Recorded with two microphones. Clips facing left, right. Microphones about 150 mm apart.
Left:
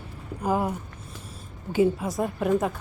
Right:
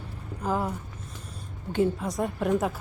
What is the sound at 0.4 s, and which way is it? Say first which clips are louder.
A woman's voice: left 3 dB; 10° left (ahead or behind).